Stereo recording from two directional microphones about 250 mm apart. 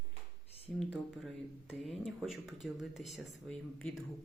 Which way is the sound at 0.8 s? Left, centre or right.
Centre.